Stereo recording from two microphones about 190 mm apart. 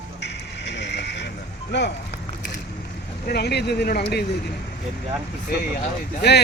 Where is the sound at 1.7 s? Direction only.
65° left (ahead or behind).